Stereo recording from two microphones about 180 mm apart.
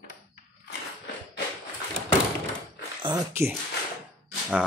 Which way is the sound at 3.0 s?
25° right (ahead or behind).